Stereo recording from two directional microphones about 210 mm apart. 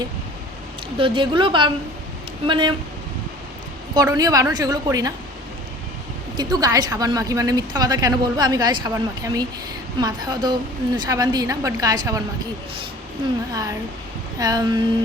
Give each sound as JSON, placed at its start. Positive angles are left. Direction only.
{"t": 0.9, "sound": "a woman's voice", "side_deg": -25}
{"t": 3.9, "sound": "a woman's voice", "side_deg": -15}
{"t": 6.3, "sound": "a woman's voice", "side_deg": -20}
{"t": 13.5, "sound": "a woman's voice", "side_deg": -15}